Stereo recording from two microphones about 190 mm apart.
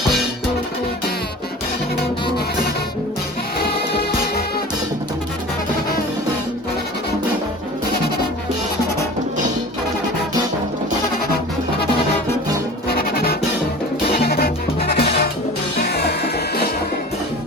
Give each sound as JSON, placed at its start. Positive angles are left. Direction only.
{"t": 12.9, "sound": "music", "side_deg": 55}